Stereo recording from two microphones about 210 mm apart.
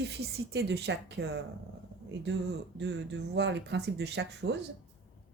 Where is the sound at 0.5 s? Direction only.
55° right (ahead or behind).